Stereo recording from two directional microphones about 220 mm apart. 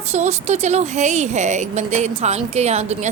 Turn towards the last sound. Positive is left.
turn(degrees=-30)  # may be behind; listen again after turning